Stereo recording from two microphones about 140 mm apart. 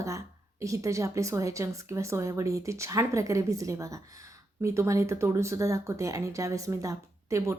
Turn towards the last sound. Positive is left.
turn(degrees=-20)  # may be behind; listen again after turning